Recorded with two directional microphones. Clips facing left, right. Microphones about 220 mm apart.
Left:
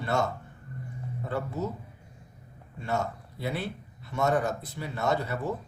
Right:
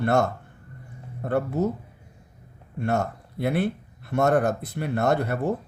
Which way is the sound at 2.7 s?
55° right (ahead or behind).